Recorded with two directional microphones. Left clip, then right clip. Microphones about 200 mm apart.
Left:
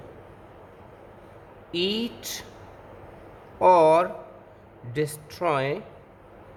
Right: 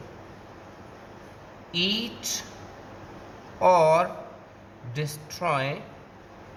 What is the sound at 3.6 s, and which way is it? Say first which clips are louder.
Speech: left 2 dB; 35° left (ahead or behind).